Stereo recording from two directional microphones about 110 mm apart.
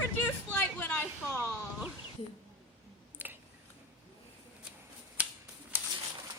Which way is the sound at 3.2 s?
15° right (ahead or behind).